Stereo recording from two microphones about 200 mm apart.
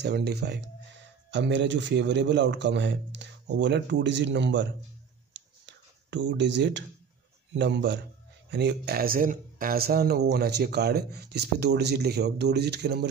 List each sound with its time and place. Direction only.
0.0 s speech: 55° right (ahead or behind)
5.3 s a sound: 65° right (ahead or behind)
7.5 s speech: 60° right (ahead or behind)